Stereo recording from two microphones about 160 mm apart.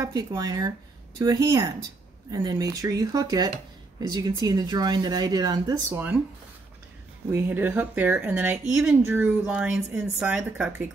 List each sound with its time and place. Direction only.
0.0 s speech: 25° right (ahead or behind)
5.9 s speech: 10° right (ahead or behind)
7.3 s speech: 15° right (ahead or behind)